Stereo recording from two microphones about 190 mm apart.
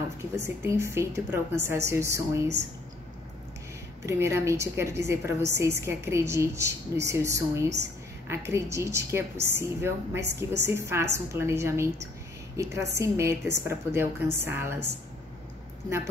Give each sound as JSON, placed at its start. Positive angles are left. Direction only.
{"t": 0.2, "sound": "a woman's voice", "side_deg": -15}
{"t": 4.0, "sound": "a woman's voice", "side_deg": -15}